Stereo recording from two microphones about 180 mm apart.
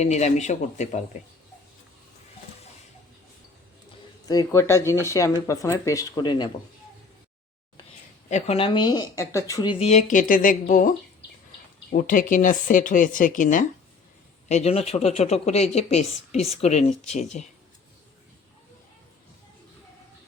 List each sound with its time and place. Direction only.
0.0 s speech: 40° left (ahead or behind)
4.3 s speech: 20° left (ahead or behind)
8.3 s speech: 35° left (ahead or behind)
11.9 s speech: 50° left (ahead or behind)